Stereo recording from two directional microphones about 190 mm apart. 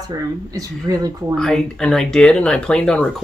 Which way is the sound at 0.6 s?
20° right (ahead or behind).